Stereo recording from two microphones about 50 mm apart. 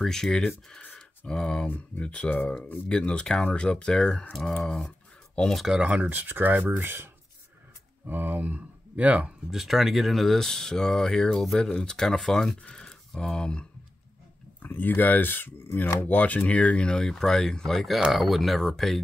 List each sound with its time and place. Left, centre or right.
0.0 s speech: centre
0.9 s a sound: centre
2.0 s speech: left; by 4.9 s centre
5.4 s speech: left
5.7 s speech: right
6.8 s speech: right
8.1 s speech: right
9.5 s speech: centre
14.6 s speech: left
16.8 s speech: centre